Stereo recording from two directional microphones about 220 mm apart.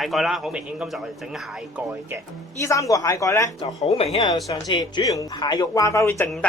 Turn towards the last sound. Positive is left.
turn(degrees=5)  # may be behind; listen again after turning